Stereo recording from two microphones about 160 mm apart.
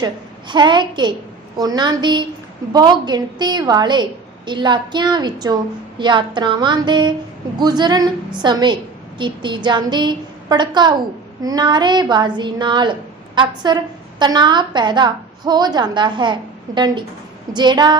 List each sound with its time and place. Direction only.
0.0 s a woman's voice: 30° right (ahead or behind)